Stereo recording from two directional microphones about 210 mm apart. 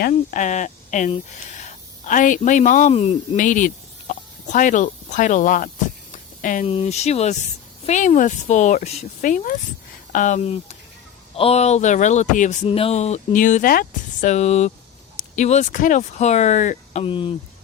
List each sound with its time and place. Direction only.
0.0 s speech: 40° left (ahead or behind); by 17.3 s 25° left (ahead or behind)